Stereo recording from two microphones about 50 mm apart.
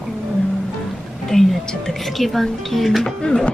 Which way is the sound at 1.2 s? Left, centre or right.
Centre.